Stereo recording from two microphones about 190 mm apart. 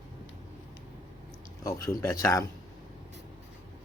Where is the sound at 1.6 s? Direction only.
15° left (ahead or behind).